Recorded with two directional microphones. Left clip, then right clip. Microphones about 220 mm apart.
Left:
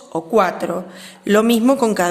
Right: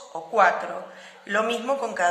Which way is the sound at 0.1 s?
45° left (ahead or behind).